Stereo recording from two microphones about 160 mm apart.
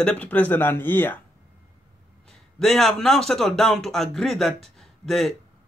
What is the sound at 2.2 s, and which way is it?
A man's voice, 5° left (ahead or behind).